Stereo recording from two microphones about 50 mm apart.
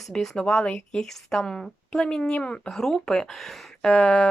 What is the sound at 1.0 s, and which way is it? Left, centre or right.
A woman's voice, centre.